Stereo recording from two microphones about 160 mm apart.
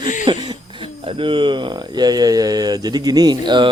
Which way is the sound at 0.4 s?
35° right (ahead or behind).